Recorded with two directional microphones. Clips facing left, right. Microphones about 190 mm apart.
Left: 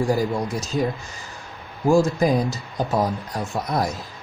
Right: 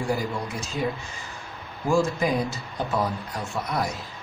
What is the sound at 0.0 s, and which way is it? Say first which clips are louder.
Speech: left 6 dB; 40° left (ahead or behind).